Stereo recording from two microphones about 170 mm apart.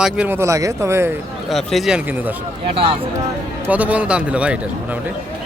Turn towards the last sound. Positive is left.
turn(degrees=-5)  # may be behind; listen again after turning